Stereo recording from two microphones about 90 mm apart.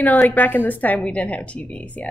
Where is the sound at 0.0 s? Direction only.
20° left (ahead or behind).